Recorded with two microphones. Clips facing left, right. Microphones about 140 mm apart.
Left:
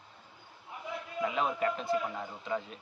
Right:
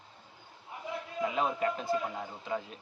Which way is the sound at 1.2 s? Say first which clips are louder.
Even; 35° right (ahead or behind).